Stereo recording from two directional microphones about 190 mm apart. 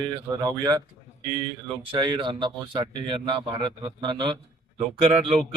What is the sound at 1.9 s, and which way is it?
A man's voice, 25° right (ahead or behind).